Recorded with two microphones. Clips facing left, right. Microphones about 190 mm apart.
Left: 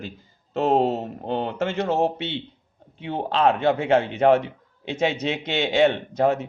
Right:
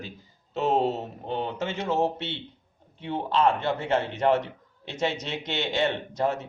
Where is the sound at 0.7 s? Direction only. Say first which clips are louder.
Left 4 dB; 50° left (ahead or behind).